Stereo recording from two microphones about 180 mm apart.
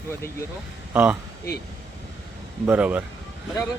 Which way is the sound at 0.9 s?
10° right (ahead or behind).